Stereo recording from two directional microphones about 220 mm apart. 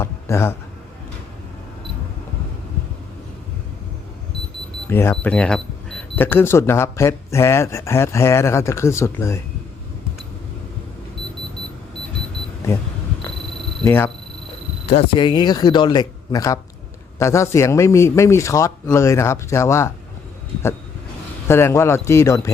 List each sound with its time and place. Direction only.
0.0 s a man's voice: 10° left (ahead or behind)
4.9 s speech: 10° left (ahead or behind)
13.8 s speech: 10° left (ahead or behind)
14.8 s speech: 25° left (ahead or behind)
21.4 s speech: 10° left (ahead or behind)